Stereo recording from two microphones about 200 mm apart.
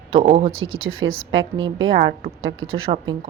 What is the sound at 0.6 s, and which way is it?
Speech, 85° right.